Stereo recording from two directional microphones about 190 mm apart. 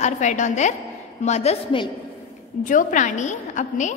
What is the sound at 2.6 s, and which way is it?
A woman's voice, 45° left (ahead or behind).